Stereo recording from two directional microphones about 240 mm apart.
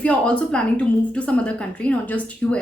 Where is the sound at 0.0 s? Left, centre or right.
Centre.